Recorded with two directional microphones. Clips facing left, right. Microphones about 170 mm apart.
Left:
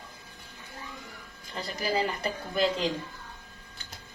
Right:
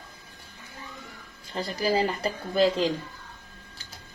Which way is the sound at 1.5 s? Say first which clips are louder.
Right 4 dB; 35° right (ahead or behind).